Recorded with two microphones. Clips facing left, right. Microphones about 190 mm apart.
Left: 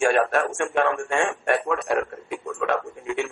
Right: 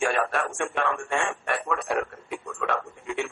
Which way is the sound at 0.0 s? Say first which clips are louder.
Left 5 dB; 45° left (ahead or behind).